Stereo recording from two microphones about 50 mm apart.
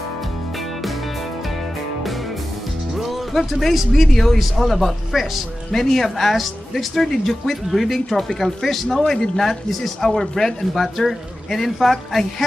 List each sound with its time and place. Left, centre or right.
3.0 s speech: centre